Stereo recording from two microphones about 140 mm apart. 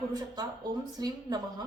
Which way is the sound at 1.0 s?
30° right (ahead or behind).